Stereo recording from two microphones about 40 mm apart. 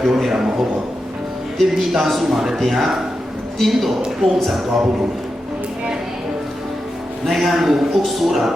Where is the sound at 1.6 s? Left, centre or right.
Centre.